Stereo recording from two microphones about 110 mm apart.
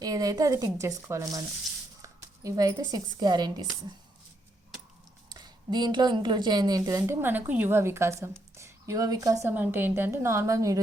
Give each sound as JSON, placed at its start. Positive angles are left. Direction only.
{"t": 0.0, "sound": "a woman's voice", "side_deg": -35}
{"t": 5.3, "sound": "a woman's voice", "side_deg": -40}
{"t": 9.5, "sound": "a woman's voice", "side_deg": -20}